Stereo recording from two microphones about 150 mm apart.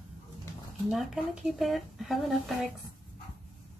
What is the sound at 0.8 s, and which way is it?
A woman's voice, centre (ahead or behind).